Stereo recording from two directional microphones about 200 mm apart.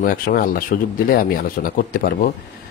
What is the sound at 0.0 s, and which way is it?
Speech, 45° left (ahead or behind).